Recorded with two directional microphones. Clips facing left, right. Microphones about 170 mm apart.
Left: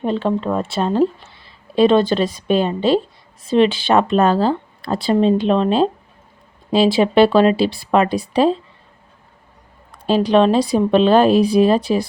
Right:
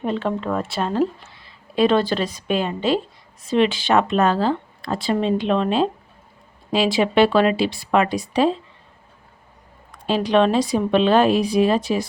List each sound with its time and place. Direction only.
0.0 s a woman's voice: 30° left (ahead or behind)
10.1 s a woman's voice: 35° left (ahead or behind)